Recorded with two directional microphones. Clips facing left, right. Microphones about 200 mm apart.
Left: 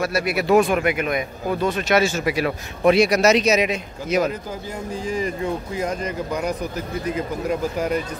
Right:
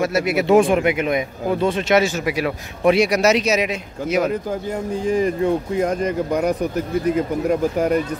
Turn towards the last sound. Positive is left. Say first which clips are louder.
# right 4 dB
turn(degrees=-55)  # may be behind; listen again after turning